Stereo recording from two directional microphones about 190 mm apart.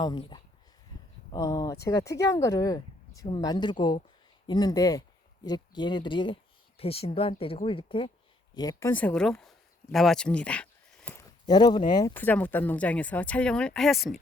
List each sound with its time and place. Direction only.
0.0 s speech: 25° left (ahead or behind)
0.9 s a sound: 20° left (ahead or behind)
1.3 s speech: 20° left (ahead or behind)
8.9 s a sound: 5° left (ahead or behind)
11.4 s speech: 20° left (ahead or behind)
12.1 s speech: 10° left (ahead or behind)